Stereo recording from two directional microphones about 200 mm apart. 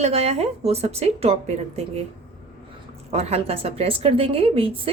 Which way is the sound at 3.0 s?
30° right (ahead or behind).